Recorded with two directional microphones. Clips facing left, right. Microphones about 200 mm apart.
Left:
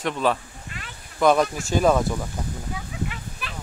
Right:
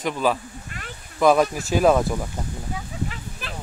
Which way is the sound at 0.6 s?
45° right (ahead or behind).